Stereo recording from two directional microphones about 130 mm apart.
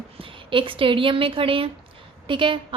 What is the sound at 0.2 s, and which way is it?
A woman's voice, 40° right (ahead or behind).